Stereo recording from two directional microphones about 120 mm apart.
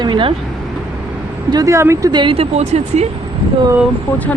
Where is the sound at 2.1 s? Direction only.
45° right (ahead or behind); by 3.0 s 65° right (ahead or behind).